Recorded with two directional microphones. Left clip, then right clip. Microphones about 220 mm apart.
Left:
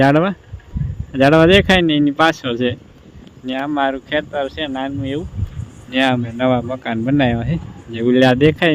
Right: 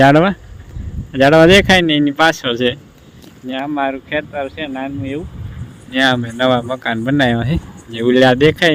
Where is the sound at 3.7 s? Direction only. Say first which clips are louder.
Left 1 dB; 5° left (ahead or behind).